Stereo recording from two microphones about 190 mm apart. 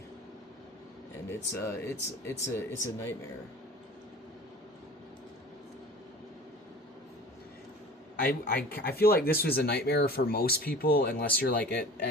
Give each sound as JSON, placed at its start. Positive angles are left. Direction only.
{"t": 1.6, "sound": "speech", "side_deg": 10}
{"t": 8.2, "sound": "speech", "side_deg": 50}